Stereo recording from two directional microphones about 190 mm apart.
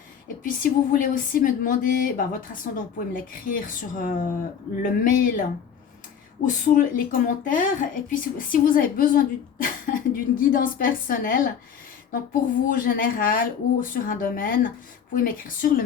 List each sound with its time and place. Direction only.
0.4 s a woman's voice: 45° left (ahead or behind)